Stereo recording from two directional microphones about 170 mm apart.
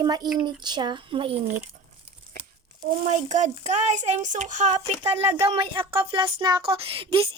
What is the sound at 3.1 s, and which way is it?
Speech, 45° right (ahead or behind).